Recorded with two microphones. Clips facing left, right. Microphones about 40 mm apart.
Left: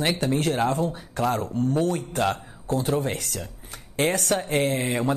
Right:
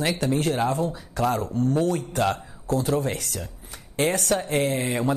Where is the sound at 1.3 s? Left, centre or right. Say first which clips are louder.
Right 1 dB; left.